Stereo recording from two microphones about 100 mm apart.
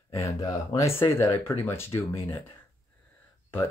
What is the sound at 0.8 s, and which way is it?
Speech, 25° left (ahead or behind).